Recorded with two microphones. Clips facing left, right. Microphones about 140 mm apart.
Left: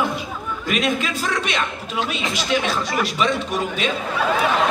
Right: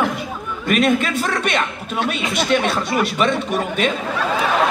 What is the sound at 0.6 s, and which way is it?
A man's voice, 55° right (ahead or behind).